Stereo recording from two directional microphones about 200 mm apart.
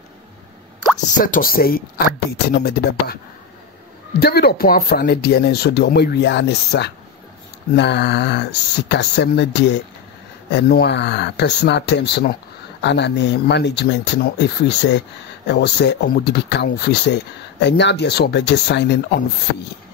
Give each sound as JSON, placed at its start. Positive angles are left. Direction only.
{"t": 1.2, "sound": "speech", "side_deg": 45}
{"t": 4.2, "sound": "speech", "side_deg": 50}